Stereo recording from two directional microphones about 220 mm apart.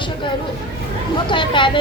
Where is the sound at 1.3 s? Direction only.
20° left (ahead or behind).